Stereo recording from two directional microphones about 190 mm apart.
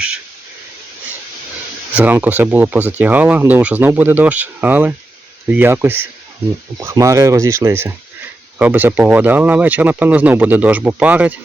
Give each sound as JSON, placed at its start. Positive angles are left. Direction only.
{"t": 2.0, "sound": "speech", "side_deg": -10}